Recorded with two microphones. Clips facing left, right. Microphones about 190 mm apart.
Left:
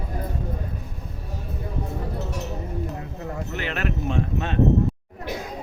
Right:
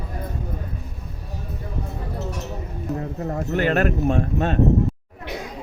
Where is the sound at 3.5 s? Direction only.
45° right (ahead or behind).